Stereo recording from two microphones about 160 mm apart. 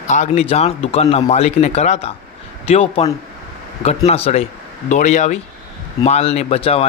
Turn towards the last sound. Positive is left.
turn(degrees=35)  # may be behind; listen again after turning